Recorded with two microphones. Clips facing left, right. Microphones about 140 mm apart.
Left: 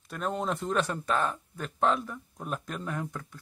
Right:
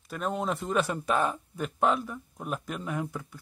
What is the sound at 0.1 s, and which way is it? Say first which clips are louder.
Speech: right 1 dB; centre (ahead or behind).